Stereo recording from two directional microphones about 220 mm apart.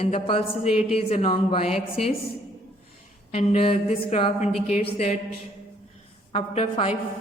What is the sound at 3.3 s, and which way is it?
A woman's voice, 30° left (ahead or behind).